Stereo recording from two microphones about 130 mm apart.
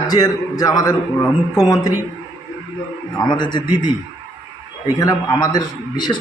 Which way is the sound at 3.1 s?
35° left (ahead or behind).